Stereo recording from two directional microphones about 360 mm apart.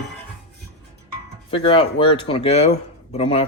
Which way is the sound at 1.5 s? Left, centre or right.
Centre.